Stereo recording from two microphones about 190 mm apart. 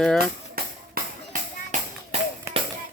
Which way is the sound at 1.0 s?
50° right (ahead or behind).